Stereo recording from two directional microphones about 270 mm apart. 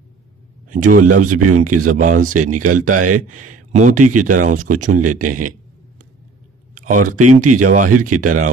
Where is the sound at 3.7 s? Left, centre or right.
Right.